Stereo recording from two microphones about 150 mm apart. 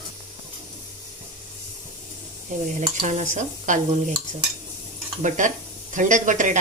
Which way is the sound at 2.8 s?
50° right (ahead or behind).